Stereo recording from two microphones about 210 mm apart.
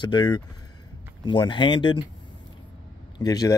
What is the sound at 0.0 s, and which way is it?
Speech, 20° left (ahead or behind).